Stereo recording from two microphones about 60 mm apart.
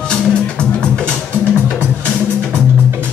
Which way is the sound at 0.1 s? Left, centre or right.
Centre.